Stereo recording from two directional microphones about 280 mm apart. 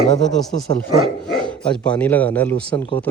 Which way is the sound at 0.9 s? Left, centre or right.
Centre.